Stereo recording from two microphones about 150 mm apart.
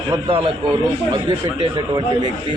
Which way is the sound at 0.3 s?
40° right (ahead or behind).